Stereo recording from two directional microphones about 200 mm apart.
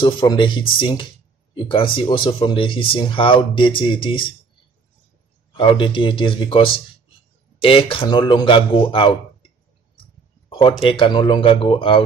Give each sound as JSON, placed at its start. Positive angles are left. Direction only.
{"t": 0.0, "sound": "speech", "side_deg": 25}
{"t": 5.6, "sound": "speech", "side_deg": 25}
{"t": 10.7, "sound": "speech", "side_deg": 30}